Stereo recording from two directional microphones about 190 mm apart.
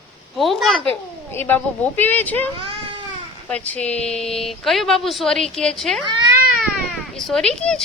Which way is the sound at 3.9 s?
35° left (ahead or behind).